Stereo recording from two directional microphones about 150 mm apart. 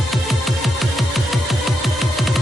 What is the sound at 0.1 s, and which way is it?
Music, centre (ahead or behind).